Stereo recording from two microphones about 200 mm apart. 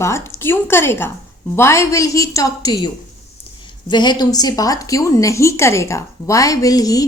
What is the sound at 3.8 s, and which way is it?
A woman's voice, 20° left (ahead or behind).